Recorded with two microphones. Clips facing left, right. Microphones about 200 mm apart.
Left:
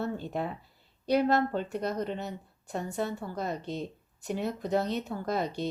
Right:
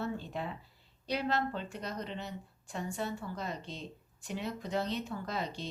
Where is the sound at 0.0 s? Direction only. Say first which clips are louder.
Left 5 dB; 50° left (ahead or behind).